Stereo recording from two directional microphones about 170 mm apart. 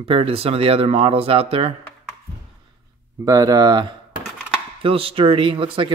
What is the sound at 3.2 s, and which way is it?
Speech, 20° right (ahead or behind).